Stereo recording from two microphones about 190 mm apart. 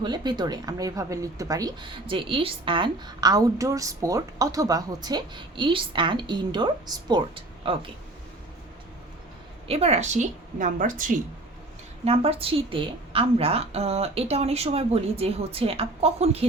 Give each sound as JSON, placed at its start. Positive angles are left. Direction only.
{"t": 0.0, "sound": "speech", "side_deg": -20}
{"t": 9.6, "sound": "a woman's voice", "side_deg": -35}
{"t": 12.0, "sound": "a woman's voice", "side_deg": -30}